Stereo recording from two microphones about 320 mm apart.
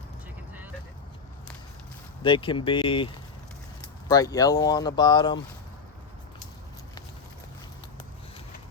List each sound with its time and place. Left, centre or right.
2.2 s speech: centre
4.1 s speech: centre